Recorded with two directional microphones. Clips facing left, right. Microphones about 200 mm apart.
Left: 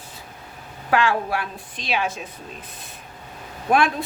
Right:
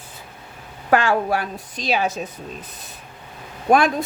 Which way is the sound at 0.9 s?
45° right (ahead or behind).